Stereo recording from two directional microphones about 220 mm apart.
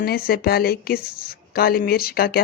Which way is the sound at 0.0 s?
45° left (ahead or behind).